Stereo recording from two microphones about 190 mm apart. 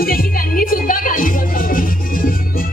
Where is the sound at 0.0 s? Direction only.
50° left (ahead or behind).